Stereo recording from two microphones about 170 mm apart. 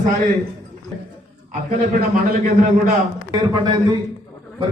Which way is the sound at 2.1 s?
55° right (ahead or behind).